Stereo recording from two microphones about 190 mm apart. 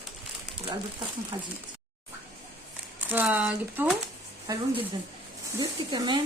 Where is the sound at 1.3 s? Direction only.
20° right (ahead or behind).